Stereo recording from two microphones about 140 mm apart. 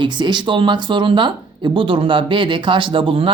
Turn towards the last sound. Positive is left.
turn(degrees=-40)  # may be behind; listen again after turning